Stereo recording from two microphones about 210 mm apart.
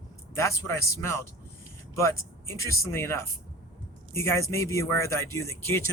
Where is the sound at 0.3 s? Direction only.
10° left (ahead or behind).